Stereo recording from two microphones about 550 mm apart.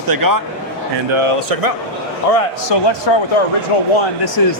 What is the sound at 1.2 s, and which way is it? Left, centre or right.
Speech, right.